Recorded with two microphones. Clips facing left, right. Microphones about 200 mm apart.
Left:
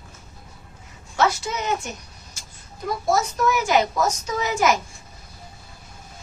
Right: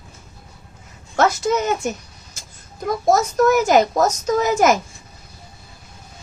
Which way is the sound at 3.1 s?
45° right (ahead or behind).